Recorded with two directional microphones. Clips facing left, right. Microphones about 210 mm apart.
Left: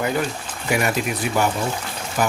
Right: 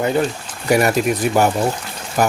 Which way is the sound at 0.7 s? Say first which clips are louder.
Right 6 dB; 40° right (ahead or behind).